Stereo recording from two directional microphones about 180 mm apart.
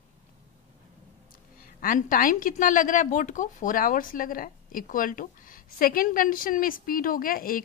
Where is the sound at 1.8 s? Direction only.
50° left (ahead or behind).